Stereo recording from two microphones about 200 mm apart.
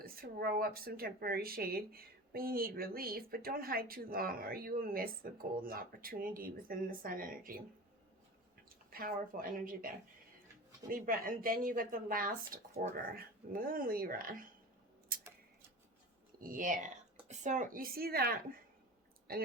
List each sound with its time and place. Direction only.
0.0 s speech: 50° right (ahead or behind)
8.7 s speech: 45° right (ahead or behind)
16.4 s speech: 40° right (ahead or behind)